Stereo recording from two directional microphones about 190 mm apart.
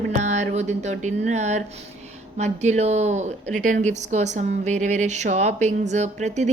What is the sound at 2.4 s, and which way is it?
A woman's voice, 35° right (ahead or behind).